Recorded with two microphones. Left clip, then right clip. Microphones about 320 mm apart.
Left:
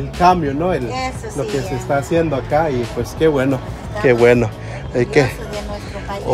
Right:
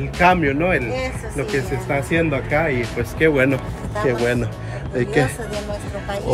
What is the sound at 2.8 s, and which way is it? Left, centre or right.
Speech, centre.